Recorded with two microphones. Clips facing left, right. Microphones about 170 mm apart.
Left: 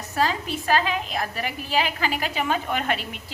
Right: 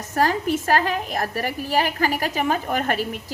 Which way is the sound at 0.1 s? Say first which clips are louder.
Right 4 dB; 50° right (ahead or behind).